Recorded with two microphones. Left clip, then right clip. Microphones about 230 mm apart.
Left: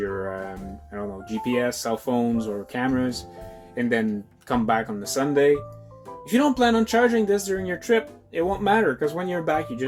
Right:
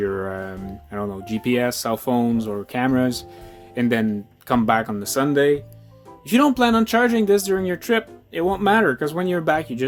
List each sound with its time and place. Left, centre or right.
0.0 s music: right
1.5 s speech: right